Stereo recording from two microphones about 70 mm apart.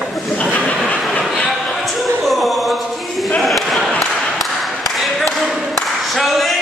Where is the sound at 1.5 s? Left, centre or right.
Centre.